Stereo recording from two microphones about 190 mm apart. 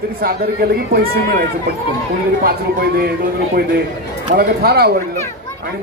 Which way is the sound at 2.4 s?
50° right (ahead or behind).